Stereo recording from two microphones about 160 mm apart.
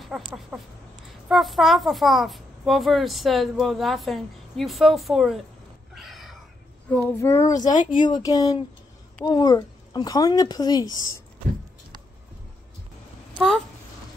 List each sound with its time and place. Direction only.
0.0 s a child's voice: centre (ahead or behind)
5.9 s a sound: centre (ahead or behind)
6.9 s a child's voice: 10° left (ahead or behind)